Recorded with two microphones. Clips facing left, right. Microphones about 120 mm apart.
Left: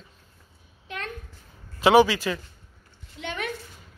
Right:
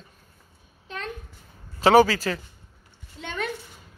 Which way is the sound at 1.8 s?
40° right (ahead or behind).